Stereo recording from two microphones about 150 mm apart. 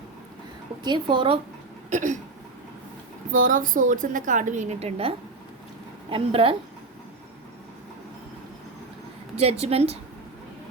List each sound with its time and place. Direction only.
0.9 s a woman's voice: 30° right (ahead or behind)
1.9 s hiccup: 55° right (ahead or behind)
3.3 s a woman's voice: 60° right (ahead or behind); by 6.6 s 35° right (ahead or behind)
9.3 s a woman's voice: 45° right (ahead or behind)